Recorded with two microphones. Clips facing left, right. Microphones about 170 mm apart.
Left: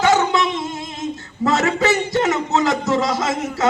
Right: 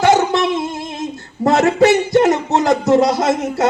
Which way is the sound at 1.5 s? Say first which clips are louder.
Right 6 dB; 55° right (ahead or behind).